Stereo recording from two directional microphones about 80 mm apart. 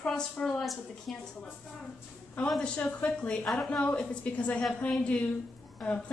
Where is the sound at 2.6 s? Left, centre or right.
Centre.